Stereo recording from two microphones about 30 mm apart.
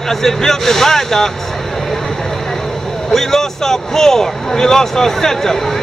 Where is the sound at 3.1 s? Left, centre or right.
Centre.